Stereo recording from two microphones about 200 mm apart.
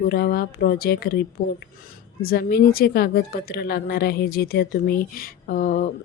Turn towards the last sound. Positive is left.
turn(degrees=45)  # may be behind; listen again after turning